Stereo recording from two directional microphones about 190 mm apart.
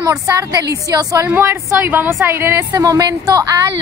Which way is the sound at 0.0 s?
15° right (ahead or behind).